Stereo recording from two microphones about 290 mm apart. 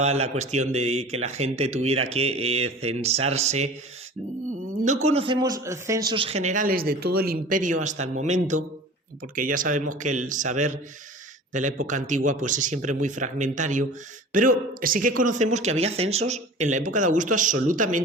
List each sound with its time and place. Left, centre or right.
0.0 s speech: right
4.8 s speech: right